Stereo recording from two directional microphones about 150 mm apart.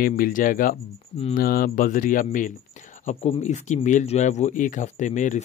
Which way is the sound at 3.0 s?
45° left (ahead or behind).